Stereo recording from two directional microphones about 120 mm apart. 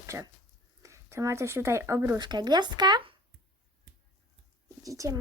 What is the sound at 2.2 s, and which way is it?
Speech, 35° right (ahead or behind).